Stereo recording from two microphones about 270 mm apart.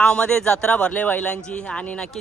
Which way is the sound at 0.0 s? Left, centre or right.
Centre.